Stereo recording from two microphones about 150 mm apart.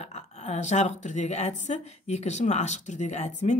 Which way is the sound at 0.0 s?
45° left (ahead or behind).